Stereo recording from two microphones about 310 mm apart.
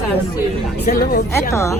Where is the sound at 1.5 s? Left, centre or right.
Centre.